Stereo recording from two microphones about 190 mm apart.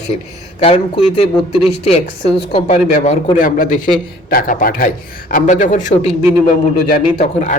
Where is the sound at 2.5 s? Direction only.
25° left (ahead or behind).